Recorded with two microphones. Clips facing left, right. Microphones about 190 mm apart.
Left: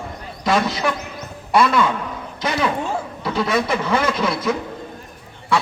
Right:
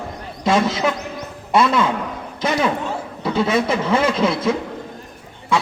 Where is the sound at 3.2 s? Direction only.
25° right (ahead or behind).